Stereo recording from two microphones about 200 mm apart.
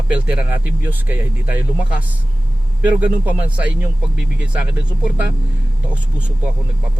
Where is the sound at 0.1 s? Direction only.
5° right (ahead or behind).